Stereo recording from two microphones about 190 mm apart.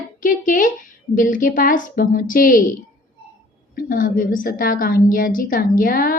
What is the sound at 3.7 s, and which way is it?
A woman's voice, 50° left (ahead or behind).